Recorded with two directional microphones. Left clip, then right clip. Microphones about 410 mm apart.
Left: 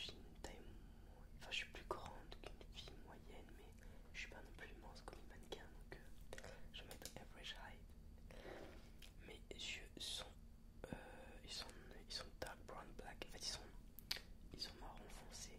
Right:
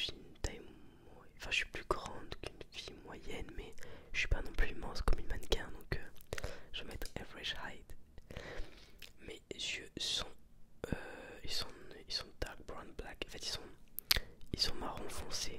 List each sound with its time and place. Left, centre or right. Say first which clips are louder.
0.0 s whispering: right 12 dB; right
9.0 s whispering: right 10 dB; right
14.0 s whispering: right 15 dB; right